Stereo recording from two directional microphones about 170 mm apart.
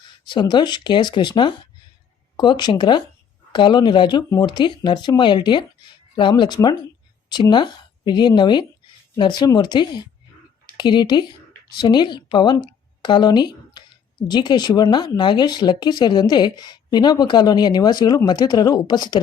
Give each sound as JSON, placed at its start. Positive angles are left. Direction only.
{"t": 0.3, "sound": "speech", "side_deg": 25}